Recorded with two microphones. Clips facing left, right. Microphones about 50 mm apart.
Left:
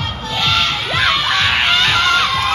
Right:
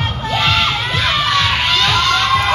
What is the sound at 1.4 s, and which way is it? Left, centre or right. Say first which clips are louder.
Music: left 1 dB; left.